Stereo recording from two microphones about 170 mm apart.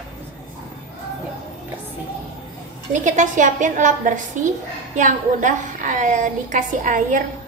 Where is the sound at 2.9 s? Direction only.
50° right (ahead or behind).